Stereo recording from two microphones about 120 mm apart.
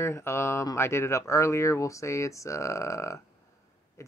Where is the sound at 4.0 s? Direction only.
25° left (ahead or behind).